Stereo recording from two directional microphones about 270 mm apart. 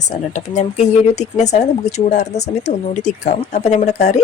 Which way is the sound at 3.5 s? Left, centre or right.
Left.